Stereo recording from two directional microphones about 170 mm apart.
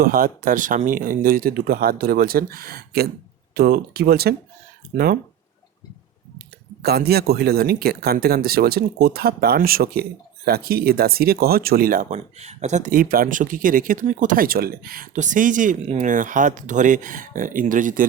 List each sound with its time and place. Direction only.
0.0 s speech: 55° right (ahead or behind)
6.8 s speech: 65° right (ahead or behind); by 18.0 s 50° right (ahead or behind)